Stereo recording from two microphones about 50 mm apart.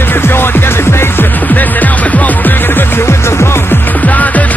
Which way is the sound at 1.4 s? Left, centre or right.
Left.